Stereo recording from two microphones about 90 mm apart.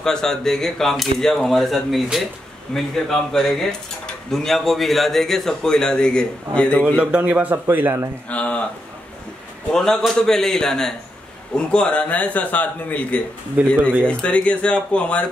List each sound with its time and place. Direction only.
0.0 s speech: 5° left (ahead or behind)
7.0 s a man's voice: 15° right (ahead or behind)
8.3 s a sound: 15° left (ahead or behind)
9.7 s a man's voice: 5° left (ahead or behind)
13.6 s a man's voice: 15° right (ahead or behind)
14.0 s a man's voice: 15° left (ahead or behind)